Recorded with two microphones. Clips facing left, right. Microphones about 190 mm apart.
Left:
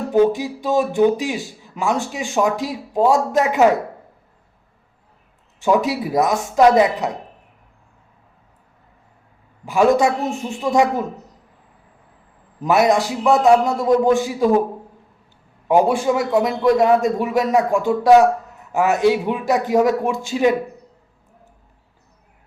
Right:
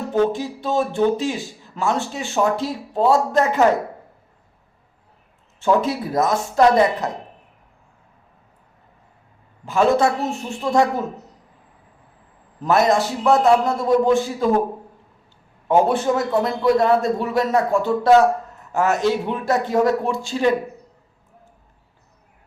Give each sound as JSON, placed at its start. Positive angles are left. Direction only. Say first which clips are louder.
{"t": 0.1, "sound": "speech", "louder": "left 4 dB", "side_deg": 15}
{"t": 5.5, "sound": "speech", "louder": "left 1 dB", "side_deg": 15}
{"t": 9.6, "sound": "speech", "louder": "left 2 dB", "side_deg": 15}
{"t": 12.6, "sound": "speech", "louder": "left 1 dB", "side_deg": 15}
{"t": 15.6, "sound": "speech", "louder": "left 1 dB", "side_deg": 15}